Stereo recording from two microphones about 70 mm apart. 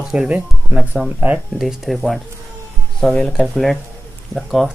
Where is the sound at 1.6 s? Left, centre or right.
Centre.